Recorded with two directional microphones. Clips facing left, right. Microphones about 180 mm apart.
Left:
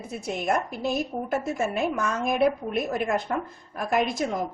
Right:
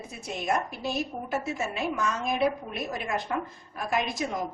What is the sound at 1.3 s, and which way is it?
A woman's voice, 50° left (ahead or behind).